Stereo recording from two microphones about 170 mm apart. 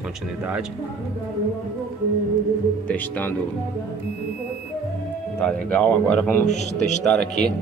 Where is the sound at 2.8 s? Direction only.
10° left (ahead or behind).